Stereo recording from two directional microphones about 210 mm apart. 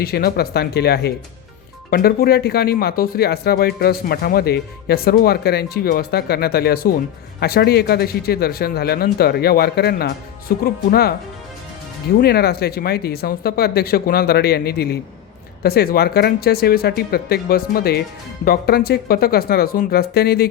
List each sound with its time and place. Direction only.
0.0 s speech: 45° left (ahead or behind)
12.2 s speech: 50° left (ahead or behind)